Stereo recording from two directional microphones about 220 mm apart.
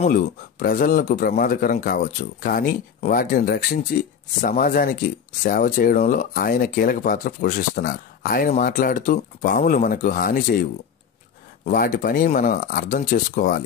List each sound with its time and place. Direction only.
0.0 s speech: 40° left (ahead or behind)
11.6 s speech: 40° left (ahead or behind)